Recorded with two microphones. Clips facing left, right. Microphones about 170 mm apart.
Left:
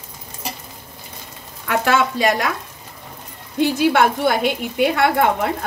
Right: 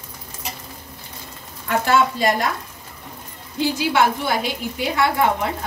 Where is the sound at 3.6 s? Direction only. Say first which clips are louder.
Left 3 dB; 55° left (ahead or behind).